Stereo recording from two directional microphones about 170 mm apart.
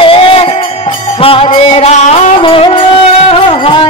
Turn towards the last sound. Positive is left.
turn(degrees=30)  # may be behind; listen again after turning